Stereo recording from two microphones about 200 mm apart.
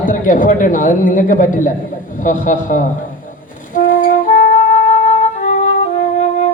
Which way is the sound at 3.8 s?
40° left (ahead or behind).